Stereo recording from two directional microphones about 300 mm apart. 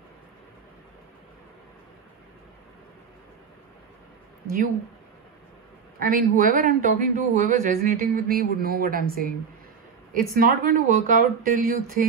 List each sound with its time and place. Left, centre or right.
5.9 s a man's voice: right